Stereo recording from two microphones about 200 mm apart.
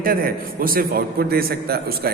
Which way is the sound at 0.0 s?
45° right (ahead or behind).